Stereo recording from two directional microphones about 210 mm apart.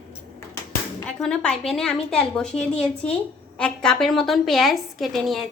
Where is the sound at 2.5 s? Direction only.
30° left (ahead or behind).